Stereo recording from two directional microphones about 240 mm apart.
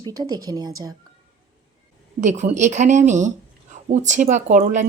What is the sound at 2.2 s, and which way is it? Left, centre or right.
Speech, right.